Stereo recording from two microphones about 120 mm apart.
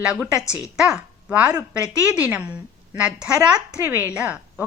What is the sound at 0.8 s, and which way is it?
A woman's voice, 5° right (ahead or behind).